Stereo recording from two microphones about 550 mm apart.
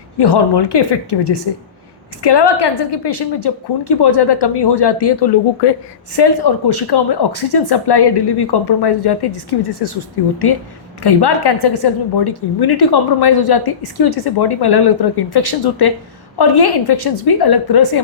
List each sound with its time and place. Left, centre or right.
0.2 s a woman's voice: left